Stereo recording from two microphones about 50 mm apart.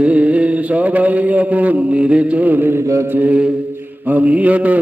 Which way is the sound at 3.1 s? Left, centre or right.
Right.